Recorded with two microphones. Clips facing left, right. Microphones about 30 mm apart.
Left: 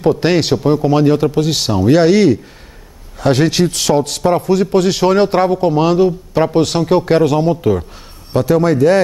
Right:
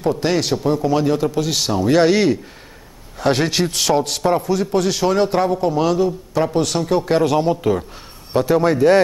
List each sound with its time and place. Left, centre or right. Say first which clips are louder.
0.2 s speech: left 5 dB; left
0.8 s a man's voice: left 5 dB; centre
4.5 s a man's voice: left 5 dB; left
7.2 s a man's voice: left 3 dB; centre